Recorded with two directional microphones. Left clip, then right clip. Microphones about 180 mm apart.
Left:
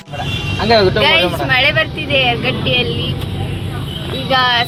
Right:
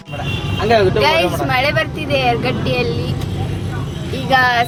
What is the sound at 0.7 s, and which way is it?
Speech, 40° left (ahead or behind).